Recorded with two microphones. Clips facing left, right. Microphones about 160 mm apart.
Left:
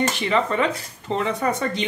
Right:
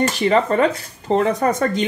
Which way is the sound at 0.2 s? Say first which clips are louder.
Right 8 dB; 40° right (ahead or behind).